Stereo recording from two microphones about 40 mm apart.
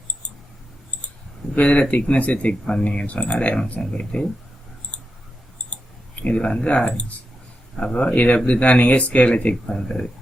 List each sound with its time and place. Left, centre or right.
1.5 s speech: left
6.2 s speech: left
8.1 s speech: left
9.6 s speech: left